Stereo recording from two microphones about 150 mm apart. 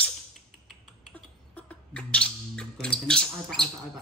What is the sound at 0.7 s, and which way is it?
Typing, 5° left (ahead or behind).